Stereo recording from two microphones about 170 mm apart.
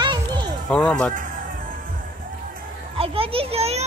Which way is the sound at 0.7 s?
5° left (ahead or behind).